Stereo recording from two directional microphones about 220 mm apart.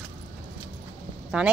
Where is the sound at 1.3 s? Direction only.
5° right (ahead or behind).